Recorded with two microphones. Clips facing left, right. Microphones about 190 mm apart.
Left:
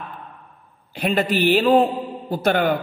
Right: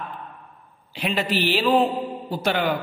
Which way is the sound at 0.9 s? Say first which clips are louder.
Left 4 dB; 50° left (ahead or behind).